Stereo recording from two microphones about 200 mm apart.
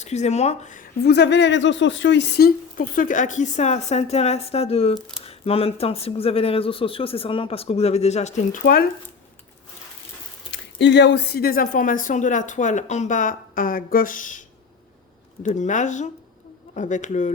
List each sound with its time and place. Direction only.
0.0 s speech: 35° left (ahead or behind)
1.0 s speech: 60° left (ahead or behind)
10.5 s speech: 65° left (ahead or behind); by 14.4 s 40° left (ahead or behind)
15.4 s speech: 35° left (ahead or behind)